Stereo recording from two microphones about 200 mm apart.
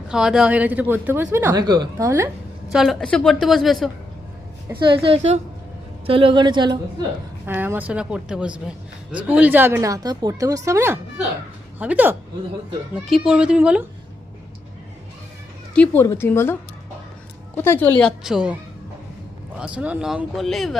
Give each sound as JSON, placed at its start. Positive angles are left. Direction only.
{"t": 0.1, "sound": "a woman's voice", "side_deg": -5}
{"t": 2.7, "sound": "a woman's voice", "side_deg": 0}
{"t": 4.8, "sound": "a woman's voice", "side_deg": -25}
{"t": 7.4, "sound": "a woman's voice", "side_deg": -10}
{"t": 15.7, "sound": "speech", "side_deg": 5}
{"t": 17.6, "sound": "a woman's voice", "side_deg": 10}
{"t": 19.5, "sound": "a woman's voice", "side_deg": -5}